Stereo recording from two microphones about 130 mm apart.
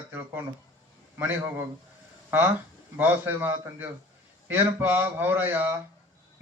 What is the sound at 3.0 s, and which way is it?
A man's voice, 15° right (ahead or behind).